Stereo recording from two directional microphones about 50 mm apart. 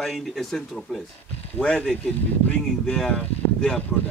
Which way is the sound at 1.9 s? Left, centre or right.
Left.